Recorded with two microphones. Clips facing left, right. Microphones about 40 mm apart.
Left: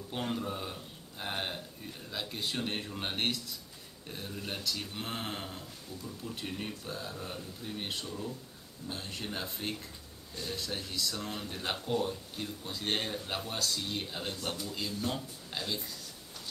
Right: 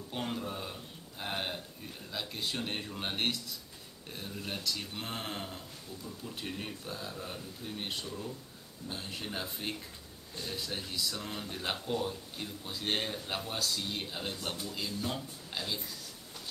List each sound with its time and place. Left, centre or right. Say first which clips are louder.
0.1 s speech: left 2 dB; centre